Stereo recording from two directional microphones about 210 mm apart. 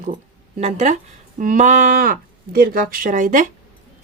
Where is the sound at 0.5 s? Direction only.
35° right (ahead or behind).